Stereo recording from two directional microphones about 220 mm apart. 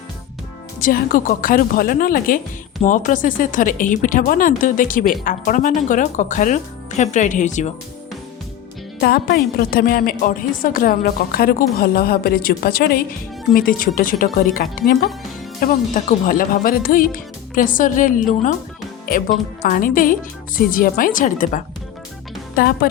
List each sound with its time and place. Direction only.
0.8 s speech: 40° left (ahead or behind)
9.0 s speech: 45° left (ahead or behind)